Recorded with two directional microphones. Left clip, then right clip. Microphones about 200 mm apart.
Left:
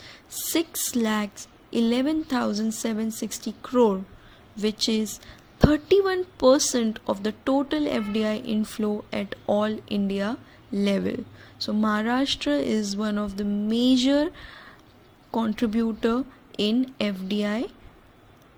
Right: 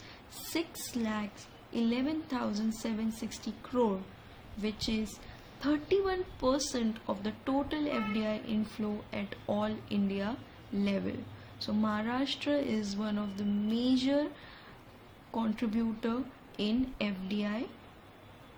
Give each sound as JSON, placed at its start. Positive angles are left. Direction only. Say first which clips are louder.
{"t": 0.5, "sound": "a woman's voice", "louder": "left 10 dB", "side_deg": 45}
{"t": 15.3, "sound": "a woman's voice", "louder": "left 8 dB", "side_deg": 40}